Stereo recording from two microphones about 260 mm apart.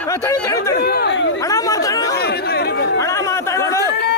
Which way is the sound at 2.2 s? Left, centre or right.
Left.